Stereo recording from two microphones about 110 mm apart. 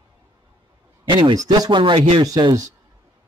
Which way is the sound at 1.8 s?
50° right (ahead or behind).